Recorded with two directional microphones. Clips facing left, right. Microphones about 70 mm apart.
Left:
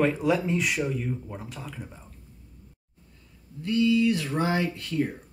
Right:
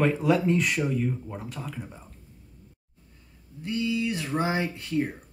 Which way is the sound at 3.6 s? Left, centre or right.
Right.